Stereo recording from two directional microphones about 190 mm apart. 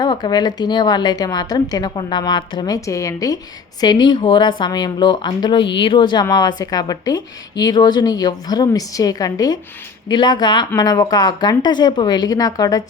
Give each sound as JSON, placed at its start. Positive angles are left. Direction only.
{"t": 0.0, "sound": "a woman's voice", "side_deg": 20}